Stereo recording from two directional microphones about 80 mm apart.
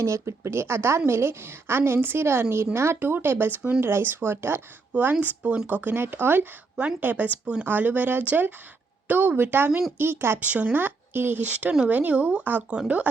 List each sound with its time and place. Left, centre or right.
0.0 s a woman's voice: right; by 12.8 s centre